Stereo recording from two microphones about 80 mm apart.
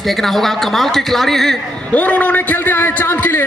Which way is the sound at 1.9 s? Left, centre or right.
Centre.